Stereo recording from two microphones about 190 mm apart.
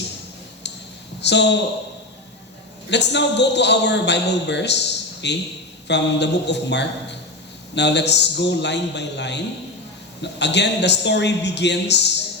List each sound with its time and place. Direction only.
1.2 s a man's voice: 65° left (ahead or behind)
2.9 s a man's voice: 65° left (ahead or behind)